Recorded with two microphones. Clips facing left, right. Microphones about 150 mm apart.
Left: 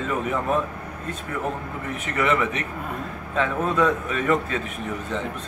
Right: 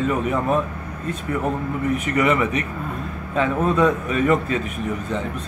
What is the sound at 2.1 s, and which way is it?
A man's voice, 10° right (ahead or behind).